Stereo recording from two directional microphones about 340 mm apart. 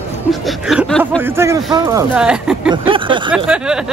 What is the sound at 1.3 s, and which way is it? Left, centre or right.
Speech, centre.